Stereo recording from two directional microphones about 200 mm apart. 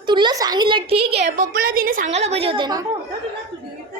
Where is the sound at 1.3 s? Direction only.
45° right (ahead or behind); by 2.9 s 20° right (ahead or behind).